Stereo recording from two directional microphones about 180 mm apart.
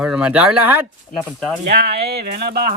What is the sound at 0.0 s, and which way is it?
Speech, 5° right (ahead or behind).